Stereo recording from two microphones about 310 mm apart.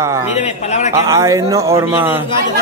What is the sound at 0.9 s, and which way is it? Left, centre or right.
Speech, centre.